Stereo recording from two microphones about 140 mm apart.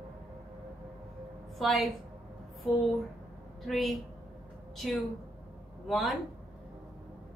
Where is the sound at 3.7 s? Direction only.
Centre (ahead or behind).